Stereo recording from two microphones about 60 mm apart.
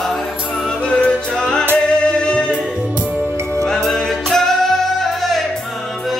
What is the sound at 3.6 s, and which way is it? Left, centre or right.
Music, centre.